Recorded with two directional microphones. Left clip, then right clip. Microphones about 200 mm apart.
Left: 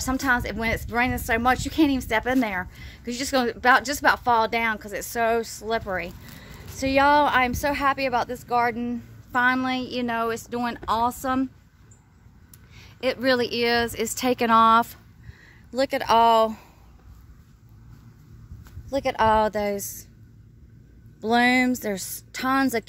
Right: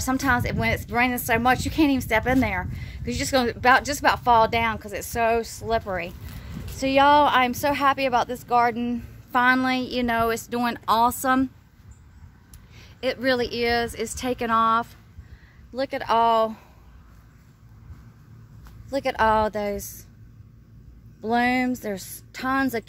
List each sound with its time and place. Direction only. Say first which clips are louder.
0.0 s a woman's voice: right 1 dB; 5° right (ahead or behind); by 11.4 s 20° right (ahead or behind)
12.7 s a woman's voice: left 1 dB; 20° left (ahead or behind); by 15.0 s 55° left (ahead or behind)
15.7 s a woman's voice: left 3 dB; 40° left (ahead or behind)
18.9 s speech: even; 10° left (ahead or behind)
21.2 s a woman's voice: left 2 dB; 25° left (ahead or behind)